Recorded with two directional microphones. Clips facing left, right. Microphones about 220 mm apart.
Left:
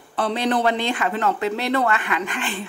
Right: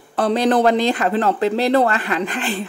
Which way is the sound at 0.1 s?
40° right (ahead or behind).